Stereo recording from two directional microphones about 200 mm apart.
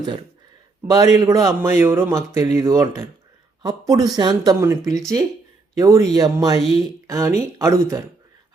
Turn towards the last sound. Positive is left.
turn(degrees=-15)  # may be behind; listen again after turning